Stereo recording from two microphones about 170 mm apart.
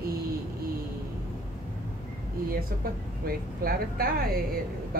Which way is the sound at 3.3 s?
60° right (ahead or behind).